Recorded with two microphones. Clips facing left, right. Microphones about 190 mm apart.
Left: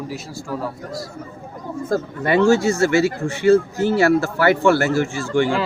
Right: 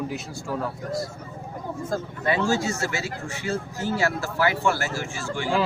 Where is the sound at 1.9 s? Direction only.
65° left (ahead or behind).